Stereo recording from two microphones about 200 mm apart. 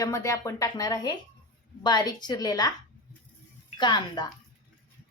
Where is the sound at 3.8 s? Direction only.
20° left (ahead or behind).